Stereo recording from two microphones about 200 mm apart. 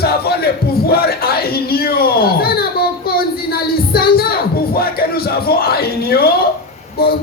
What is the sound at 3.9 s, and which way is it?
Music, 50° left (ahead or behind).